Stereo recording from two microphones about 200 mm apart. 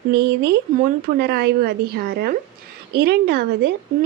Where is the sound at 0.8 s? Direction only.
50° right (ahead or behind).